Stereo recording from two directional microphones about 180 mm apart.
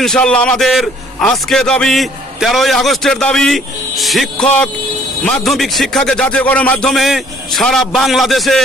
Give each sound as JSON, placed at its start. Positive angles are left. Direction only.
{"t": 0.0, "sound": "a man's voice", "side_deg": 5}